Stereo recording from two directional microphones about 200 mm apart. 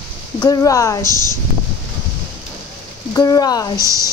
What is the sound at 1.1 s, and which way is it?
Speech, 20° right (ahead or behind).